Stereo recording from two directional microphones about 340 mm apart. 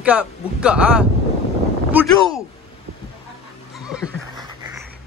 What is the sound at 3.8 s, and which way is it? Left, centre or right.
Neigh, centre.